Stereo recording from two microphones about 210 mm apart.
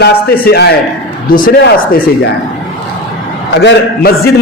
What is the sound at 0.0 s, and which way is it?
A man's voice, 50° left (ahead or behind).